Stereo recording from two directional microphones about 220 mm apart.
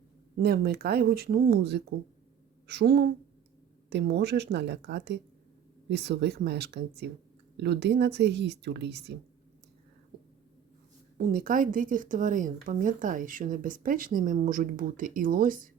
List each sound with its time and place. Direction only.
0.3 s a woman's voice: 45° right (ahead or behind)
11.2 s speech: 40° right (ahead or behind)